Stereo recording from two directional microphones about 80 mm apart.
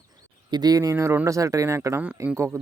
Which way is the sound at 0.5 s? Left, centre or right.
Right.